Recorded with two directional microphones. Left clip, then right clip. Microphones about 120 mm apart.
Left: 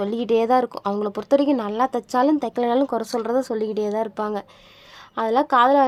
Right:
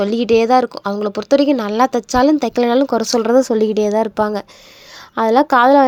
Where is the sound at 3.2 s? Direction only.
35° right (ahead or behind).